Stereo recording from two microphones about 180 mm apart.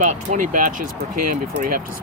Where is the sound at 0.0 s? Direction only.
45° right (ahead or behind).